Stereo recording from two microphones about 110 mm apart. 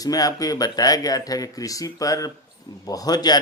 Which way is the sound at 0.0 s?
35° left (ahead or behind).